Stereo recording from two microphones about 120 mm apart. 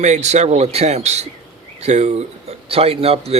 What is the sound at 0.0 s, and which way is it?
Speech, 75° right (ahead or behind).